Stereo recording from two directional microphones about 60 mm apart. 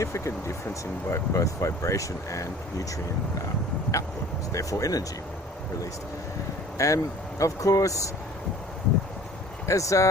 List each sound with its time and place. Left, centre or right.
0.0 s speech: left
1.1 s speech: left
4.5 s speech: left
6.7 s speech: left
9.6 s speech: left